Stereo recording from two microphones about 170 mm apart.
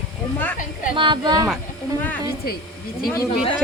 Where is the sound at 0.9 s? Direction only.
30° right (ahead or behind).